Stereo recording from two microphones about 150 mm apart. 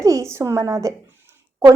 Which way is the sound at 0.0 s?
20° right (ahead or behind).